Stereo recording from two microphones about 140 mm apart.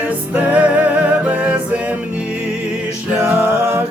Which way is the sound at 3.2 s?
15° right (ahead or behind).